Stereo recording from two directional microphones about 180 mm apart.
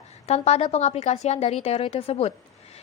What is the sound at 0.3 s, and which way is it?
A woman's voice, 35° left (ahead or behind).